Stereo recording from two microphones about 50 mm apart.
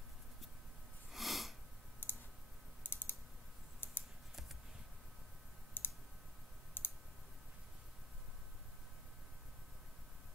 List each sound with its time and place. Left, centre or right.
1.1 s sniff: centre
2.0 s clicking: left
2.8 s typing: left
5.8 s clicking: left